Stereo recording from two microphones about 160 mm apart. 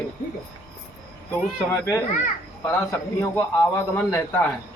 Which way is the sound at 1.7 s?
15° left (ahead or behind).